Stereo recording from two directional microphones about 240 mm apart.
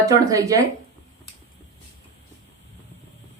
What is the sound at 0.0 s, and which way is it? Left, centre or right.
Speech, centre.